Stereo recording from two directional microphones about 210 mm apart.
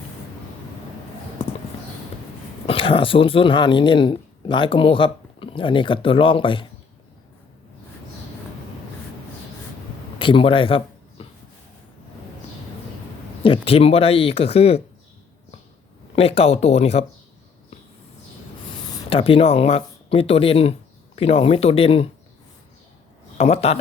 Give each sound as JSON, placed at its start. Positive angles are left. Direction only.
{"t": 2.6, "sound": "speech", "side_deg": 25}
{"t": 10.2, "sound": "a sound", "side_deg": 25}
{"t": 13.4, "sound": "speech", "side_deg": 25}
{"t": 16.1, "sound": "speech", "side_deg": 30}
{"t": 18.9, "sound": "speech", "side_deg": 20}
{"t": 23.4, "sound": "speech", "side_deg": 30}